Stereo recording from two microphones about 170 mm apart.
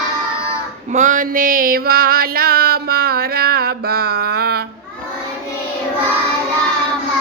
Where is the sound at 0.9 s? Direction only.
45° right (ahead or behind); by 4.6 s 65° right (ahead or behind).